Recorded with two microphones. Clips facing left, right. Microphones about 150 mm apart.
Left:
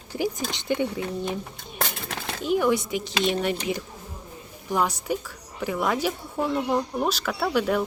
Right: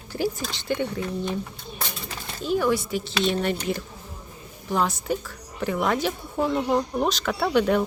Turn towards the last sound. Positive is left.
turn(degrees=5)  # may be behind; listen again after turning